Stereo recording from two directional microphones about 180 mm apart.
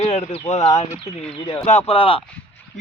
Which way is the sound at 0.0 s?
35° left (ahead or behind).